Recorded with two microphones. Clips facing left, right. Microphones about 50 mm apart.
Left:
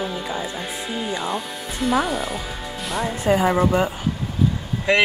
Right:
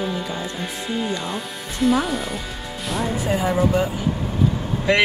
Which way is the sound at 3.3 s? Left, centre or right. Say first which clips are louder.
Left 4 dB; left.